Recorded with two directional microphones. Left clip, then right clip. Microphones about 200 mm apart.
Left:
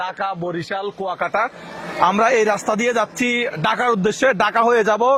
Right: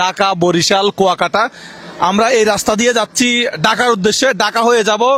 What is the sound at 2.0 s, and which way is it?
A man's voice, 30° right (ahead or behind).